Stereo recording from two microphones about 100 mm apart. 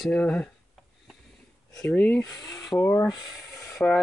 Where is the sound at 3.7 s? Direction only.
5° left (ahead or behind).